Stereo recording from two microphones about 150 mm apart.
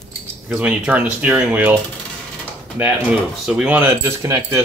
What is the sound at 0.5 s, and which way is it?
Speech, 10° right (ahead or behind).